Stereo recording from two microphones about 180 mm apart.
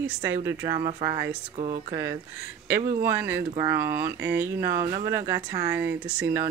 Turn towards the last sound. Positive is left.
turn(degrees=-10)  # may be behind; listen again after turning